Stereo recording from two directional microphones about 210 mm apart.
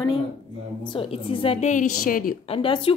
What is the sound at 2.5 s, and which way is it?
Speech, 25° left (ahead or behind).